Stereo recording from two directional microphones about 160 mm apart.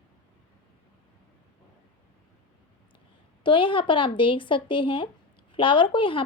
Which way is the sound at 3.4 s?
30° left (ahead or behind).